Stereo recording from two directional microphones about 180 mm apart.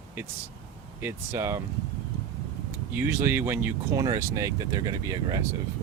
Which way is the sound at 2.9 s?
10° right (ahead or behind).